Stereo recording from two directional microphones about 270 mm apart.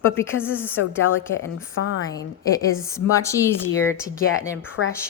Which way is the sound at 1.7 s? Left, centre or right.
Left.